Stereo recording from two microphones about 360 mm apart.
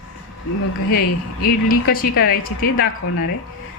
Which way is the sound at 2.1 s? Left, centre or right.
Left.